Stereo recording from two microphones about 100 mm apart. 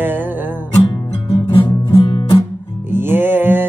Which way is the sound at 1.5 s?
50° left (ahead or behind).